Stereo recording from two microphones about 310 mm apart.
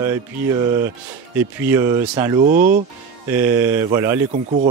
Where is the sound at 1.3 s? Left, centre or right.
Centre.